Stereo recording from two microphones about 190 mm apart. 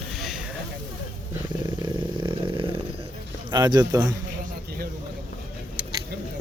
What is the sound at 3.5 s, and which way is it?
Speech, 20° right (ahead or behind).